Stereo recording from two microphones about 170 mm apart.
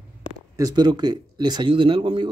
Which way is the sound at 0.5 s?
20° right (ahead or behind).